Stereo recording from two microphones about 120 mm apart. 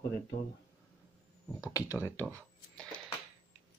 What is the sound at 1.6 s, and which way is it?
Speech, 30° left (ahead or behind).